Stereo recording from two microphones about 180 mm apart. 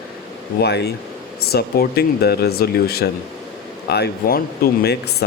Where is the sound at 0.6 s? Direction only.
65° left (ahead or behind).